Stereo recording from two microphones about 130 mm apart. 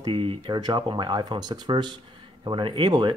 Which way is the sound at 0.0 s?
40° right (ahead or behind).